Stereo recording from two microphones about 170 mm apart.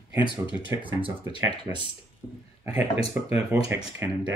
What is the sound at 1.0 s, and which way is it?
Speech, 25° right (ahead or behind).